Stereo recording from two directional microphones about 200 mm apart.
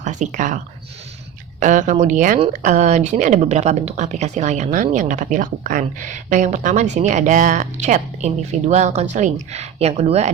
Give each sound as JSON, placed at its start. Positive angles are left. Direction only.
{"t": 0.0, "sound": "speech", "side_deg": -35}